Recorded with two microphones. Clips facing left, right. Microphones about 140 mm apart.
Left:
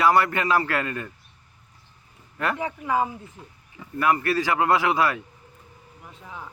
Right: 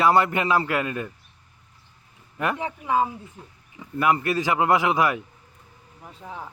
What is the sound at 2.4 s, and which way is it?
A man's voice, 20° right (ahead or behind).